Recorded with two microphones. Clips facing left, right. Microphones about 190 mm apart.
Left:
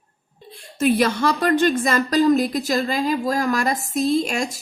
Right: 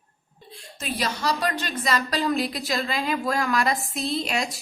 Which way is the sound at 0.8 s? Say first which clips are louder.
Left 10 dB; 55° left (ahead or behind).